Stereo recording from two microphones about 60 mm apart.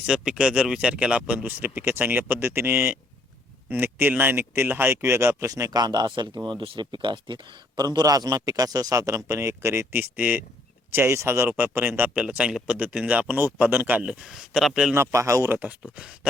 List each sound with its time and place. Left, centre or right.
0.0 s speech: centre; by 5.5 s right
5.5 s speech: right
7.8 s a man's voice: right
9.2 s speech: right
10.0 s speech: right
10.9 s speech: right
12.1 s speech: centre
14.0 s speech: centre
14.3 s speech: centre
14.9 s a man's voice: right
15.5 s speech: centre